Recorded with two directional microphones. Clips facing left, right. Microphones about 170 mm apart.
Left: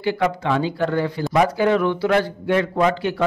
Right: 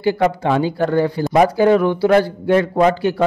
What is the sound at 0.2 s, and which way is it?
Speech, 40° right (ahead or behind).